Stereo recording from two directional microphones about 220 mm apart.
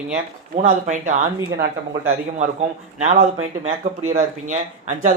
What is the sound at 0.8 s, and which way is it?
Speech, 35° right (ahead or behind).